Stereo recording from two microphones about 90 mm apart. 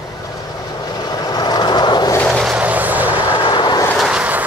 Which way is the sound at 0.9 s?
50° left (ahead or behind).